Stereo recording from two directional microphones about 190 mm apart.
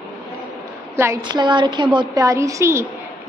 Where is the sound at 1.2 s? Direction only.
25° right (ahead or behind).